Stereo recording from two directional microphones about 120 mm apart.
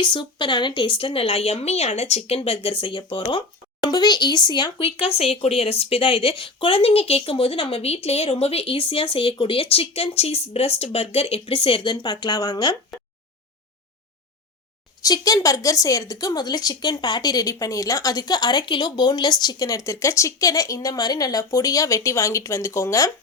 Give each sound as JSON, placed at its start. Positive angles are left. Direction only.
{"t": 0.0, "sound": "speech", "side_deg": 40}
{"t": 15.0, "sound": "speech", "side_deg": 30}